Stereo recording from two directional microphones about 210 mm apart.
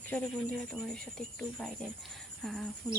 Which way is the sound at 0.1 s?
10° left (ahead or behind).